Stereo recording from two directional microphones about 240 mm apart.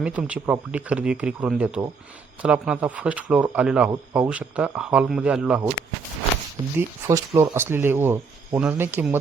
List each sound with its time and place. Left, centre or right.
0.0 s speech: centre
6.7 s speech: centre